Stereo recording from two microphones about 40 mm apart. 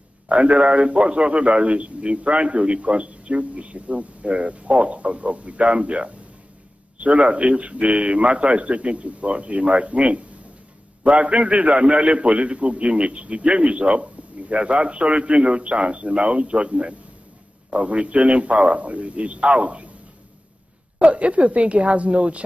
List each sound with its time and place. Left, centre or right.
0.3 s a man's voice: right
21.0 s a man's voice: right